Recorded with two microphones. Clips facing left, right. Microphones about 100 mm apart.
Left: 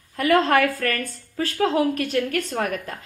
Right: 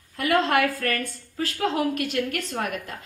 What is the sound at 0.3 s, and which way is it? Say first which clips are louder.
Speech: left 3 dB; 20° right (ahead or behind).